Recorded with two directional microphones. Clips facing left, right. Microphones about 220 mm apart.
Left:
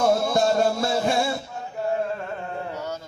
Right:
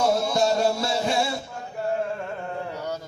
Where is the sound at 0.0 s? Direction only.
50° left (ahead or behind).